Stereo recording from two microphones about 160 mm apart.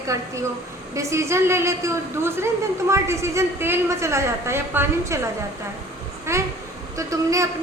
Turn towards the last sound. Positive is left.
turn(degrees=-20)  # may be behind; listen again after turning